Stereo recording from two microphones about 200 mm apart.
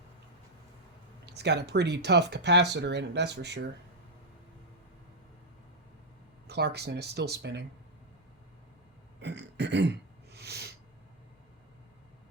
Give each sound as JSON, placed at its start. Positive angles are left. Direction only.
{"t": 1.2, "sound": "speech", "side_deg": -55}
{"t": 6.5, "sound": "speech", "side_deg": -55}
{"t": 9.2, "sound": "a sound", "side_deg": -60}